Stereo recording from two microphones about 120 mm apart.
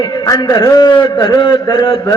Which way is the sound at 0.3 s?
30° left (ahead or behind).